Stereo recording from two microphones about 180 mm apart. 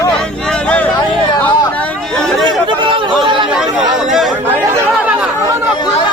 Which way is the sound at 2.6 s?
30° right (ahead or behind).